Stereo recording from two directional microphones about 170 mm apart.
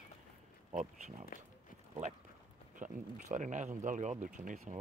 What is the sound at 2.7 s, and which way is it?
Speech, 50° right (ahead or behind).